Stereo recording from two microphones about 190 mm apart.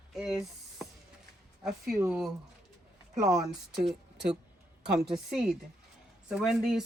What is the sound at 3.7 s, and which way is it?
A woman's voice, centre (ahead or behind).